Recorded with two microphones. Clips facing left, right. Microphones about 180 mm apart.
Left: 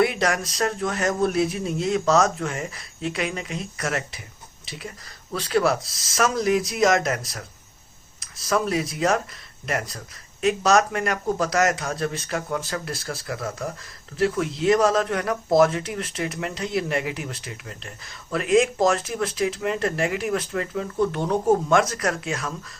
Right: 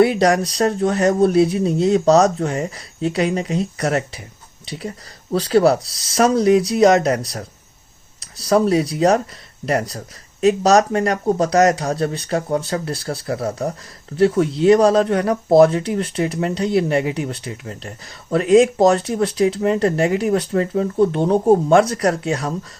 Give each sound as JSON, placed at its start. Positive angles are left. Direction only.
{"t": 0.0, "sound": "speech", "side_deg": -35}